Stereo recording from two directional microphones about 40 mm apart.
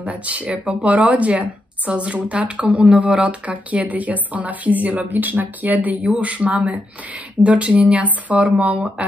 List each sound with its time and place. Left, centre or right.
0.0 s a woman's voice: right